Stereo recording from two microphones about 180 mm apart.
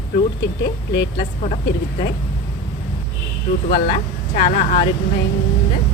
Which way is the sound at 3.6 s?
55° left (ahead or behind).